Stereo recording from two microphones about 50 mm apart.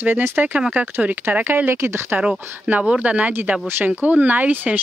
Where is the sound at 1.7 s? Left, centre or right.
Right.